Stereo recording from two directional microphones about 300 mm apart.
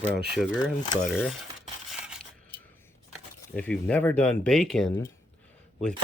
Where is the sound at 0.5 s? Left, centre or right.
Centre.